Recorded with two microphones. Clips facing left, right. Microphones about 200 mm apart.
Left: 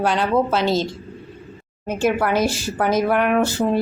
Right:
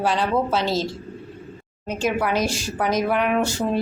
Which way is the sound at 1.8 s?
55° left (ahead or behind).